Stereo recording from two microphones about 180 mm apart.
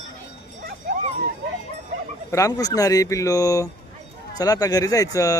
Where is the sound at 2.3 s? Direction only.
20° left (ahead or behind).